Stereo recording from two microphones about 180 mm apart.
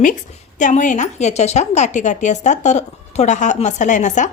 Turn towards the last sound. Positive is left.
turn(degrees=45)  # may be behind; listen again after turning